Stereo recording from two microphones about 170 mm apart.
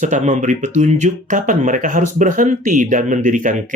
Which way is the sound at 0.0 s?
45° right (ahead or behind).